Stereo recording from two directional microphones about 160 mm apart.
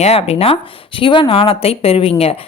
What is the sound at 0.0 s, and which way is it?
Speech, 40° left (ahead or behind).